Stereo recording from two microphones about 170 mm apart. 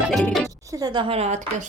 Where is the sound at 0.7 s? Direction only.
25° right (ahead or behind); by 1.7 s 40° right (ahead or behind).